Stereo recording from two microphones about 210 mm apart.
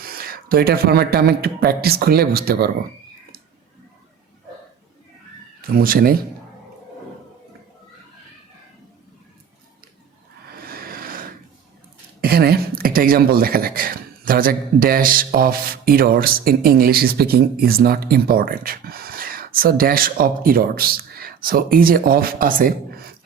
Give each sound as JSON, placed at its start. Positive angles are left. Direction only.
{"t": 0.0, "sound": "speech", "side_deg": -45}
{"t": 5.6, "sound": "speech", "side_deg": -45}
{"t": 10.6, "sound": "a sound", "side_deg": -45}
{"t": 12.2, "sound": "speech", "side_deg": -45}